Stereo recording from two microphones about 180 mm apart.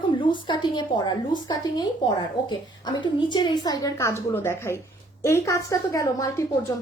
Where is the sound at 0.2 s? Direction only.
25° left (ahead or behind).